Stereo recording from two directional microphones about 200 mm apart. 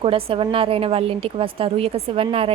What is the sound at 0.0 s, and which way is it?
A woman's voice, 25° right (ahead or behind).